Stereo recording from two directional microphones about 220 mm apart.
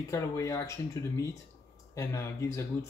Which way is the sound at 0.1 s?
15° left (ahead or behind).